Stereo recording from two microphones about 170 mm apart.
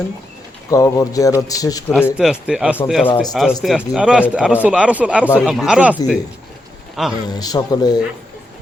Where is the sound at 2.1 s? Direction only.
5° right (ahead or behind).